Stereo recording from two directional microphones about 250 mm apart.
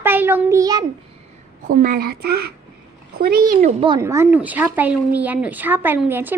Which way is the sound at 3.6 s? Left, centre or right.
Right.